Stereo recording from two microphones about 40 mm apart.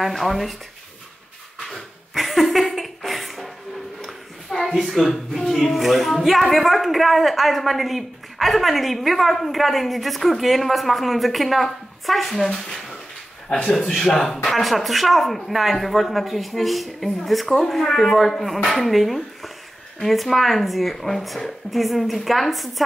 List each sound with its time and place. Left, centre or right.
0.1 s a woman's voice: centre
1.7 s a sound: centre
4.7 s a woman's voice: centre
13.6 s a man's voice: centre
13.8 s a woman's voice: centre